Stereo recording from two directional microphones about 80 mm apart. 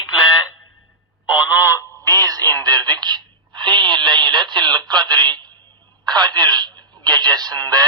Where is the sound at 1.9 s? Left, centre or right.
Right.